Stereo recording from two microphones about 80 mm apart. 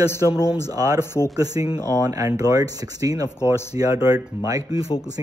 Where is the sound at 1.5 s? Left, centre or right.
Right.